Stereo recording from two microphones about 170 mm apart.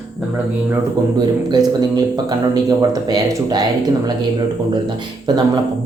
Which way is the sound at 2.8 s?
25° right (ahead or behind).